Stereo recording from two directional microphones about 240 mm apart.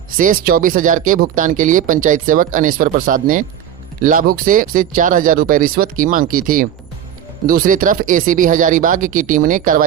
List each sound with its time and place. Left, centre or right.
0.2 s speech: right